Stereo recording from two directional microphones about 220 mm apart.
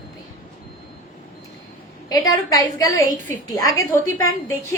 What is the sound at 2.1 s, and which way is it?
A woman's voice, 15° left (ahead or behind).